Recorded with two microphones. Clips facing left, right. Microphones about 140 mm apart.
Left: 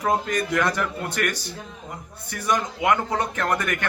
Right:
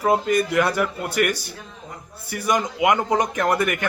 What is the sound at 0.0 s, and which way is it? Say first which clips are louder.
Speech: right 4 dB; 10° right (ahead or behind).